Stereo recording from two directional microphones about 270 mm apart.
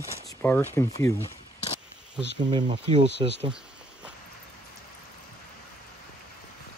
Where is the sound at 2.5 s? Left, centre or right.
Centre.